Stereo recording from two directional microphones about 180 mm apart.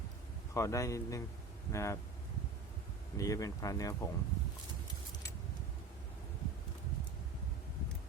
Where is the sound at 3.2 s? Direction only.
20° left (ahead or behind).